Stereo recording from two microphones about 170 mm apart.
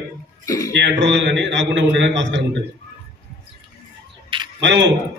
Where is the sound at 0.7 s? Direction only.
90° right.